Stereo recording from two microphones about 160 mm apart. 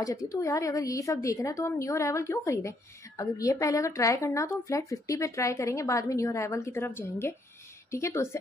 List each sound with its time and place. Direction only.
0.0 s a woman's voice: 20° left (ahead or behind)